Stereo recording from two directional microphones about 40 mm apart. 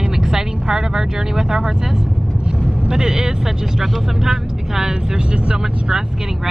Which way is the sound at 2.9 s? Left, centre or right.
Centre.